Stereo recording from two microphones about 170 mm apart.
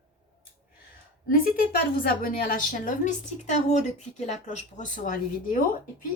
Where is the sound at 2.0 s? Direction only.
60° left (ahead or behind).